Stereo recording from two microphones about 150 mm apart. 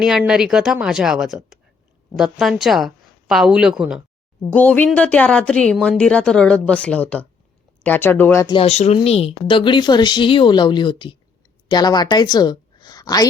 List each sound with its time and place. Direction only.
0.0 s a woman's voice: 5° right (ahead or behind)
4.4 s a woman's voice: 10° left (ahead or behind)
8.4 s a woman's voice: 40° left (ahead or behind)